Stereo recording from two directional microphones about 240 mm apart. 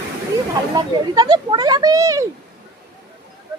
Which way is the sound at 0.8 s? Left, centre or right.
Centre.